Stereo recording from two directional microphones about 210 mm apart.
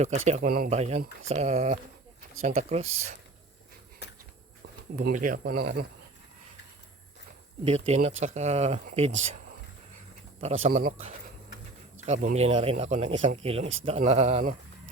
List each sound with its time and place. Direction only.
0.3 s speech: 40° right (ahead or behind)
4.9 s speech: 40° right (ahead or behind)
7.6 s speech: 30° right (ahead or behind)
10.4 s speech: 35° right (ahead or behind)
12.0 s speech: 35° right (ahead or behind)